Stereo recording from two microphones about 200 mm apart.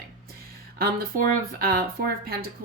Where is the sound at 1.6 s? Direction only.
50° right (ahead or behind).